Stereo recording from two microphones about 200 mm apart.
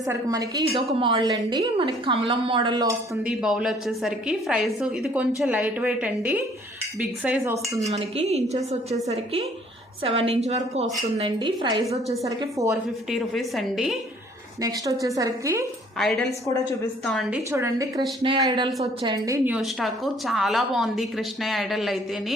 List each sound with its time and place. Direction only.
0.1 s a woman's voice: 20° right (ahead or behind)
0.7 s speech: 30° right (ahead or behind)
3.2 s a woman's voice: 5° right (ahead or behind)
7.9 s a woman's voice: 30° right (ahead or behind)
13.1 s a woman's voice: centre (ahead or behind)
14.6 s a woman's voice: 15° right (ahead or behind)
16.0 s a woman's voice: centre (ahead or behind)
17.5 s a woman's voice: 15° right (ahead or behind)
19.5 s a woman's voice: centre (ahead or behind)